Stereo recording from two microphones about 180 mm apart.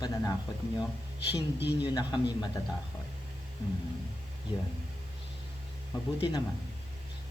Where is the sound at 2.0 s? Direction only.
25° left (ahead or behind).